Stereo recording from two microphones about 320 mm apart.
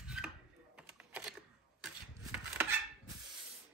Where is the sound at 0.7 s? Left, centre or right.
Centre.